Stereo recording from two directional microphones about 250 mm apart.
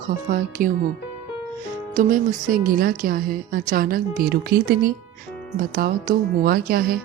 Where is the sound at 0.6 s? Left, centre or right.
Right.